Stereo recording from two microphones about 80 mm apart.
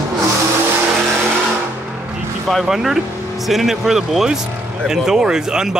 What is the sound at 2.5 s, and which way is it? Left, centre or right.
Speech, centre.